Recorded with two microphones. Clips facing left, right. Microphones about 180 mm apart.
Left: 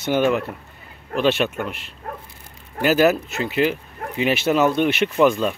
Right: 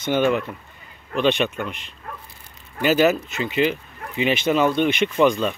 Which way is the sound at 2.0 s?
45° left (ahead or behind).